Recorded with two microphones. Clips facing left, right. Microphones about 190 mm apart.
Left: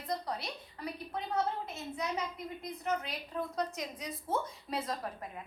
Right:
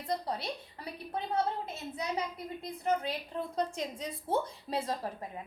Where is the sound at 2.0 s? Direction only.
30° right (ahead or behind).